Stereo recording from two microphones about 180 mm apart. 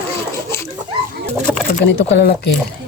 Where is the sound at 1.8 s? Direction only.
75° left (ahead or behind).